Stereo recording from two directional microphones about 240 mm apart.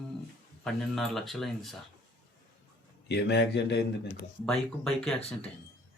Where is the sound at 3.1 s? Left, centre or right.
Left.